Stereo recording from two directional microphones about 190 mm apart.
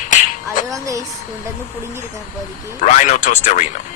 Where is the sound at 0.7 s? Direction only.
15° right (ahead or behind).